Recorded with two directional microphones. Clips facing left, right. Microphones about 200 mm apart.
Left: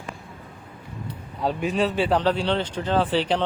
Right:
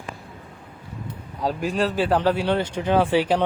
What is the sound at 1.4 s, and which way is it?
Speech, centre (ahead or behind).